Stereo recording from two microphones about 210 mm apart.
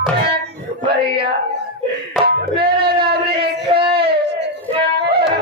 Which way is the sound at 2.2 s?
50° right (ahead or behind).